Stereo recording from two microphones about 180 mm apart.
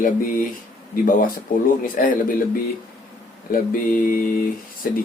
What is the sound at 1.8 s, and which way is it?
Speech, 50° left (ahead or behind).